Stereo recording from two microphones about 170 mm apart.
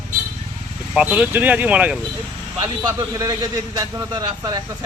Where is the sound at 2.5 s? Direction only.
20° right (ahead or behind).